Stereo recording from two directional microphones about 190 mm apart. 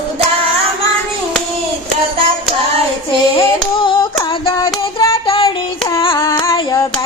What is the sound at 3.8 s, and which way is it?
Hands, 25° left (ahead or behind).